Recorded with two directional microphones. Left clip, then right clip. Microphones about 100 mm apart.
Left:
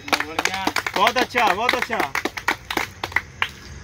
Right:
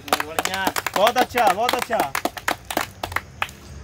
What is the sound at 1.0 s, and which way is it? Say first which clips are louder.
Speech: right 1 dB; 40° right (ahead or behind).